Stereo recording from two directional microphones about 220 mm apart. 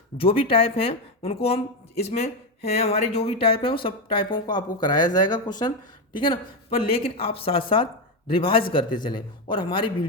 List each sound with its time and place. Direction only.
0.2 s a man's voice: 25° left (ahead or behind)